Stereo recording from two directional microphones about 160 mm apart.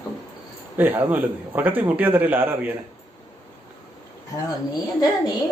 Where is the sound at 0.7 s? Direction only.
10° right (ahead or behind).